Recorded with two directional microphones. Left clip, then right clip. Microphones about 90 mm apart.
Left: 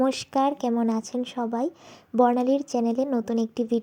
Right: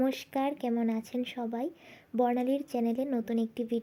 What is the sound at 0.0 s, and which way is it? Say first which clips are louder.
A woman's voice: left 8 dB; 35° left (ahead or behind).